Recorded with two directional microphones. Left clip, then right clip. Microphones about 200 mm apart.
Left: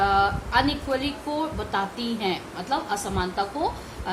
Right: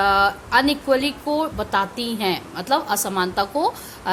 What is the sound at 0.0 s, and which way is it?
Speech, 55° right (ahead or behind).